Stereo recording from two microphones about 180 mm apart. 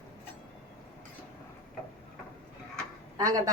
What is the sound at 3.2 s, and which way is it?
Speech, 20° right (ahead or behind).